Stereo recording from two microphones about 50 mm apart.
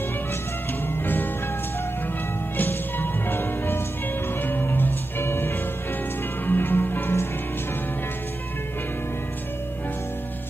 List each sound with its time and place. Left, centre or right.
2.5 s music: left